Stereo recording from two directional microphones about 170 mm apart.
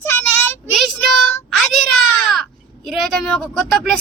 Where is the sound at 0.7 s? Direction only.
Centre (ahead or behind).